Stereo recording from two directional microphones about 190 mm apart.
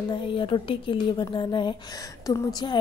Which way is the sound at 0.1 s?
25° left (ahead or behind).